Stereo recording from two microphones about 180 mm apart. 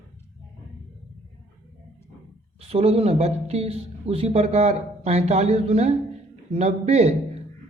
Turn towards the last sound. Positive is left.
turn(degrees=-35)  # may be behind; listen again after turning